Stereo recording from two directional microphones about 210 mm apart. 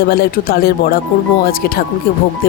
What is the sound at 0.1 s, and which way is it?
Speech, 45° left (ahead or behind).